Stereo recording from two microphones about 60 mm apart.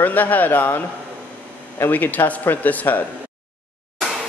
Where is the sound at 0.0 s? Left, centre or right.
Left.